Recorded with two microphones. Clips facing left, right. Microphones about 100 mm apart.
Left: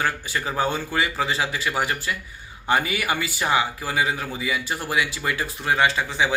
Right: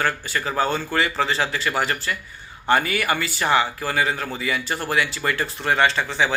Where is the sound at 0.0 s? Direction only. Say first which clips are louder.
Right 1 dB; 15° left (ahead or behind).